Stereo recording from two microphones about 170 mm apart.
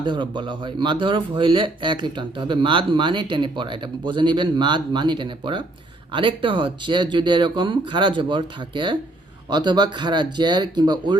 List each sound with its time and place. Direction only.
0.0 s a man's voice: 25° right (ahead or behind)